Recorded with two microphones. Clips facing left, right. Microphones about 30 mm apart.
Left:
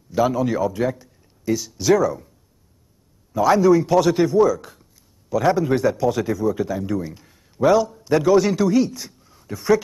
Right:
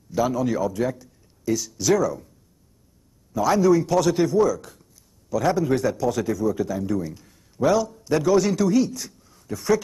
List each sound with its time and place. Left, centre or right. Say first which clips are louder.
0.1 s a man's voice: left 3 dB; centre
3.3 s a man's voice: left 3 dB; centre